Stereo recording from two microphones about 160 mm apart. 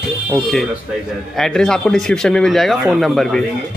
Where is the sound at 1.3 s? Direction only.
5° left (ahead or behind).